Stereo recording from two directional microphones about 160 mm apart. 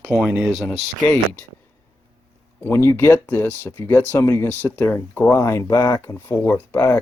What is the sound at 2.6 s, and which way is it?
Speech, 15° left (ahead or behind).